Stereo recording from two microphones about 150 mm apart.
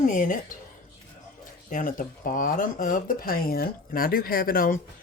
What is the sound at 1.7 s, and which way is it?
Speech, 65° left (ahead or behind).